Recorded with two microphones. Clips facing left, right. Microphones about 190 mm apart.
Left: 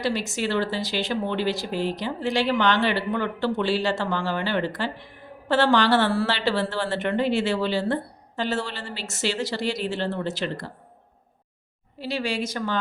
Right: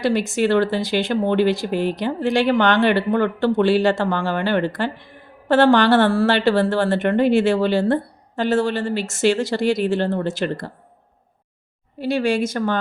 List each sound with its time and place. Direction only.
0.0 s speech: 55° right (ahead or behind)
11.9 s speech: 50° right (ahead or behind)